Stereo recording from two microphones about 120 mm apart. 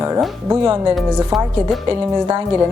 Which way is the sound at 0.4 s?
25° right (ahead or behind).